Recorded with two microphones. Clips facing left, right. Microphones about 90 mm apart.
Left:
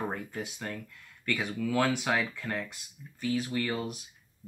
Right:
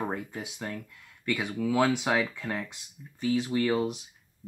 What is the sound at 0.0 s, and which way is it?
Speech, 10° right (ahead or behind).